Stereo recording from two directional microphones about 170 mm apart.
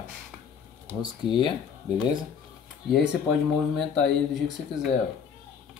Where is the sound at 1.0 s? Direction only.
30° left (ahead or behind).